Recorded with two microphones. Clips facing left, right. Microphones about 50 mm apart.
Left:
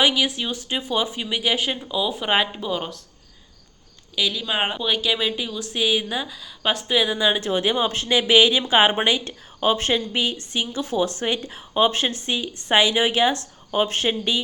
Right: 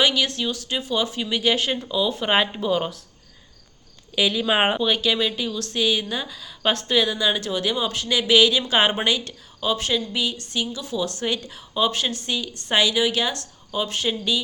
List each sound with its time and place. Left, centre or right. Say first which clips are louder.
0.0 s speech: left 1 dB; centre
4.1 s speech: right 3 dB; centre
4.8 s speech: right 1 dB; centre; by 9.3 s left
9.6 s speech: left 3 dB; left